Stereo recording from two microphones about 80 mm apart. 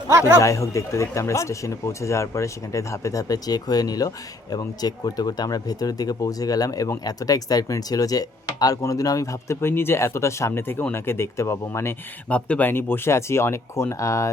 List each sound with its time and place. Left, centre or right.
0.1 s speech: right
0.3 s speech: left
12.3 s speech: centre; by 14.3 s left